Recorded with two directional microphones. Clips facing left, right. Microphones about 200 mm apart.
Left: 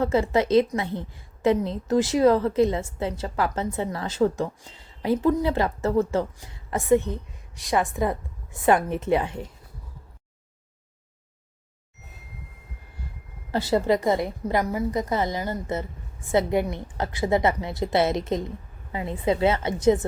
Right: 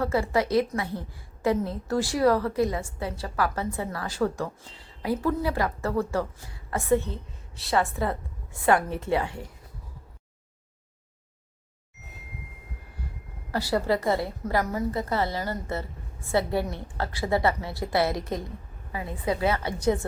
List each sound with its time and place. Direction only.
0.0 s a woman's voice: 20° left (ahead or behind)
13.5 s a woman's voice: 20° left (ahead or behind)